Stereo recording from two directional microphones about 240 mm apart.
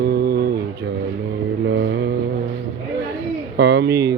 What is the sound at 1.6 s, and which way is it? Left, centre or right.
Mantra, right.